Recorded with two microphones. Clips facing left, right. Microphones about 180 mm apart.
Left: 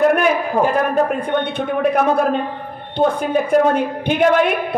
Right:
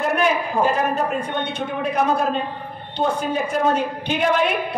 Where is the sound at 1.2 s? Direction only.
55° left (ahead or behind).